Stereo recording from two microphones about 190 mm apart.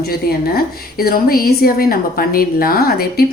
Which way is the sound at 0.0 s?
50° left (ahead or behind).